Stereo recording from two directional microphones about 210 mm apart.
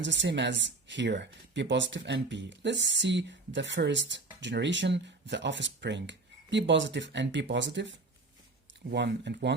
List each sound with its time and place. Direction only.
0.0 s speech: 60° right (ahead or behind)